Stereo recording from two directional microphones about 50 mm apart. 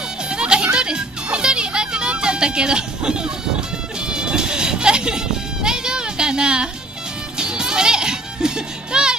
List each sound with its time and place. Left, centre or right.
0.3 s music: centre